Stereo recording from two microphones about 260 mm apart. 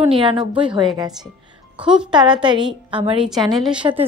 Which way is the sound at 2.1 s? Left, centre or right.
Centre.